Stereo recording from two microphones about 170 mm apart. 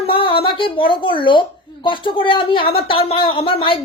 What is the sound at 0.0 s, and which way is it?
A woman's voice, 30° left (ahead or behind).